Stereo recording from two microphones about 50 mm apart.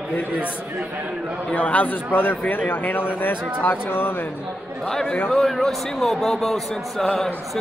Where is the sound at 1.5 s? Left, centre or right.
Left.